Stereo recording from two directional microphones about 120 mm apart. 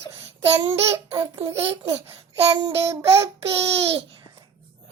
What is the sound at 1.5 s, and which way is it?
Speech, 55° right (ahead or behind).